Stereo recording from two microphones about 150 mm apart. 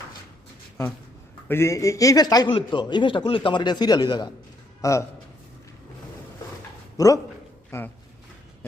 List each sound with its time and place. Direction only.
1.5 s a man's voice: 15° left (ahead or behind)
6.9 s speech: 20° left (ahead or behind)